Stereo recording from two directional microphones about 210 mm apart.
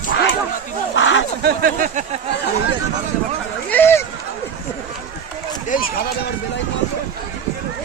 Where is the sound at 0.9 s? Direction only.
65° left (ahead or behind).